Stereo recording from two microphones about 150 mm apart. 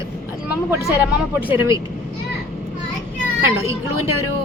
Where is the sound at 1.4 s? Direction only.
15° right (ahead or behind).